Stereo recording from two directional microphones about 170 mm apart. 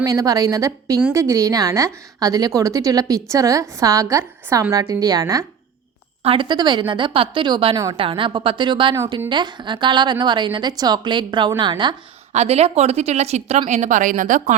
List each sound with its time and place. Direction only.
0.0 s a woman's voice: 20° right (ahead or behind)
6.2 s a woman's voice: 30° right (ahead or behind)
12.3 s speech: 40° right (ahead or behind)